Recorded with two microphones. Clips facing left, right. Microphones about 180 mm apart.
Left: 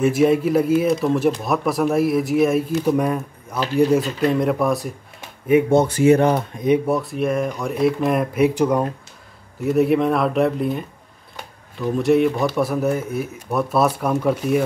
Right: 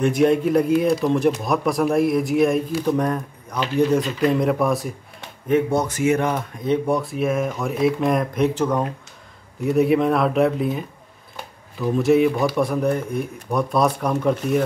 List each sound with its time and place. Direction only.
0.0 s speech: 5° left (ahead or behind)
5.7 s speech: 30° left (ahead or behind)
6.9 s speech: centre (ahead or behind)
9.6 s speech: centre (ahead or behind)
11.3 s a sound: centre (ahead or behind)
12.4 s speech: centre (ahead or behind)